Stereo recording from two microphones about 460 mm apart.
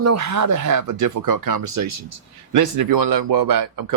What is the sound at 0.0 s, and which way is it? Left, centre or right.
Speech, right.